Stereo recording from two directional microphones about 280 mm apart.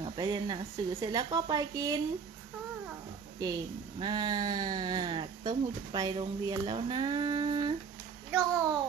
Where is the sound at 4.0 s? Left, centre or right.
Centre.